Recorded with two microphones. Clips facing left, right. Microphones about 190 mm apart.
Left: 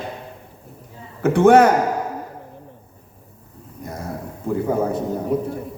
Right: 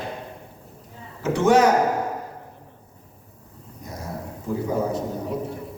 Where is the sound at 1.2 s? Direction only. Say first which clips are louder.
Left 5 dB; 55° left (ahead or behind).